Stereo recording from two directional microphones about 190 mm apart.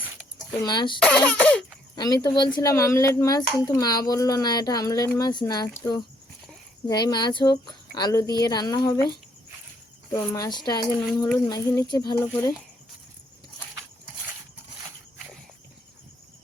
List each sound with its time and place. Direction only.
0.6 s speech: 20° left (ahead or behind)
0.9 s speech: 5° left (ahead or behind)
2.0 s speech: 20° left (ahead or behind)
10.1 s speech: 15° left (ahead or behind)